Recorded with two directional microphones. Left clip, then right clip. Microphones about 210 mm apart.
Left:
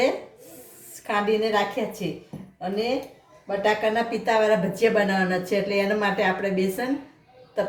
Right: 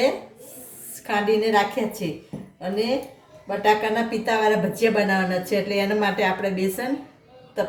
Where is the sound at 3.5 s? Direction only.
15° left (ahead or behind).